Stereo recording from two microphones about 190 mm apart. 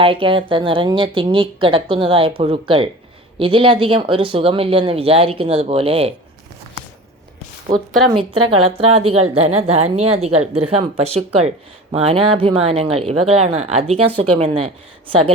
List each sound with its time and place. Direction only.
0.0 s speech: 25° right (ahead or behind)
8.1 s a woman's voice: 30° right (ahead or behind)